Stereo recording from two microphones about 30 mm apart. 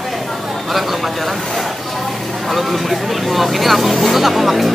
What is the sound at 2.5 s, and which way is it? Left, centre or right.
Speech, centre.